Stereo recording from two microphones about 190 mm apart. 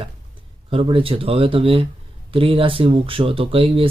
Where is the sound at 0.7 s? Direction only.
30° right (ahead or behind).